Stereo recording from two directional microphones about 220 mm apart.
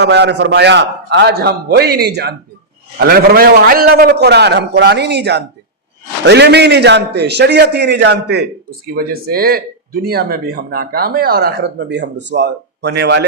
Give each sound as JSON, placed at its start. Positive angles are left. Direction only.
{"t": 0.0, "sound": "speech", "side_deg": -50}